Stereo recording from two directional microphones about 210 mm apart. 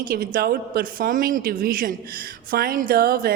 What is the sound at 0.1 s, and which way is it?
Speech, 45° right (ahead or behind).